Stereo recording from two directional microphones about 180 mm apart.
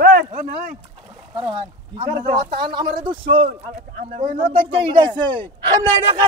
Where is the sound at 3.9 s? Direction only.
50° right (ahead or behind).